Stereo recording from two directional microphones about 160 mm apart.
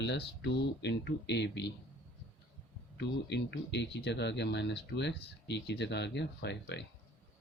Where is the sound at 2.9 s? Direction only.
90° left.